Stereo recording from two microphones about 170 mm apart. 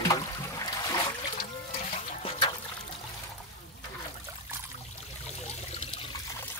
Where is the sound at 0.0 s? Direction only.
20° left (ahead or behind).